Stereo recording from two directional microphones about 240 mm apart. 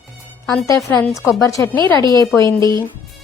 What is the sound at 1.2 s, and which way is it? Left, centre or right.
A woman's voice, centre.